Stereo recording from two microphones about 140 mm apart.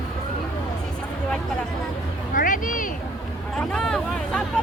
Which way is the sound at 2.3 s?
70° left (ahead or behind).